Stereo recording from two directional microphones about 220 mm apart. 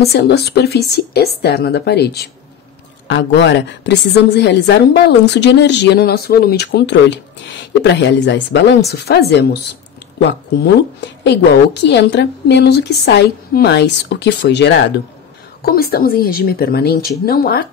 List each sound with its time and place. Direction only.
0.0 s a woman's voice: 45° left (ahead or behind)